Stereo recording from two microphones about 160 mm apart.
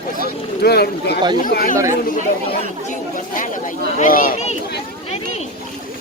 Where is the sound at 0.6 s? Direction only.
80° left.